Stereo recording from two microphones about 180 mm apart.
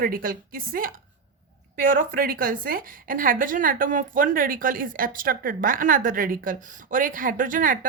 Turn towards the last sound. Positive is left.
turn(degrees=-50)  # may be behind; listen again after turning